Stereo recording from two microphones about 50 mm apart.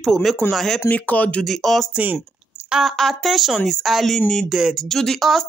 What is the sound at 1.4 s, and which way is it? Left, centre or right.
Speech, centre.